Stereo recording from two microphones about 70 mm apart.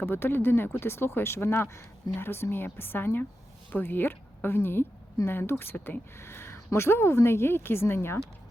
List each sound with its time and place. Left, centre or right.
0.0 s speech: left